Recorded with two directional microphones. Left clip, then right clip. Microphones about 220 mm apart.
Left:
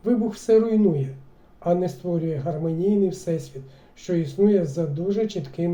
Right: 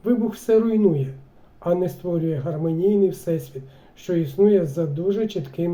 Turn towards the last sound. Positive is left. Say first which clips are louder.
# right 1 dB
turn(degrees=-15)  # may be behind; listen again after turning